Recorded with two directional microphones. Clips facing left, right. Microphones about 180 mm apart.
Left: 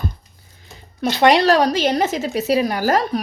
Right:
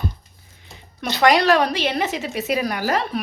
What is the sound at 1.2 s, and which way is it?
A woman's voice, 25° left (ahead or behind).